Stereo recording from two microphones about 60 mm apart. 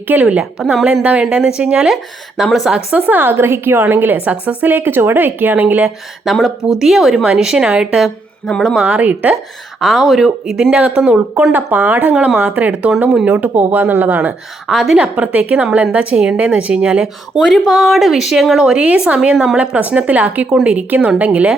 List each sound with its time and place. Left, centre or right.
0.1 s a woman's voice: right
0.6 s speech: centre
1.0 s a woman's voice: centre
3.1 s a woman's voice: right
6.4 s a woman's voice: centre
8.0 s speech: centre
8.7 s a woman's voice: centre
9.8 s speech: centre
10.7 s a woman's voice: centre
11.5 s a woman's voice: right
14.7 s speech: centre
14.9 s a woman's voice: centre
17.4 s speech: centre
18.8 s a woman's voice: centre